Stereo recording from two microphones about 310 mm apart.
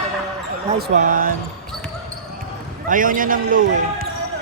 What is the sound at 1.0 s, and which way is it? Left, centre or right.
Speech, right.